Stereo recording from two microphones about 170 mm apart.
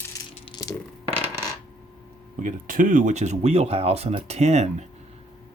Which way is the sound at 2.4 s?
50° right (ahead or behind).